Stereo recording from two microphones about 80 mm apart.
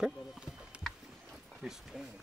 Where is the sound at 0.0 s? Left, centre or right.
Centre.